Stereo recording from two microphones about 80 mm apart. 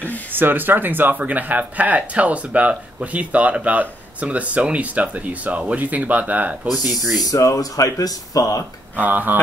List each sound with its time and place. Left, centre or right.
0.3 s speech: right
7.2 s speech: left
8.9 s speech: right